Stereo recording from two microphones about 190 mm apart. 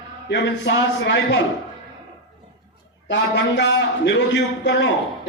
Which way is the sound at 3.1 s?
65° left (ahead or behind).